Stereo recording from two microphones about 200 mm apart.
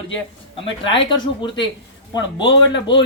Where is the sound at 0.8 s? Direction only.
25° left (ahead or behind).